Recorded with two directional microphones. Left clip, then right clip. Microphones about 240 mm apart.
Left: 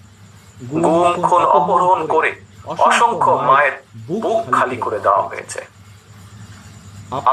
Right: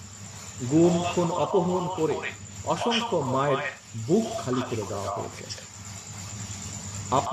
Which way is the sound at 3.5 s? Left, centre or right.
Left.